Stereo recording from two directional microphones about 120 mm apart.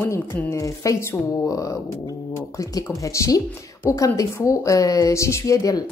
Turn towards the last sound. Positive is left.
turn(degrees=30)  # may be behind; listen again after turning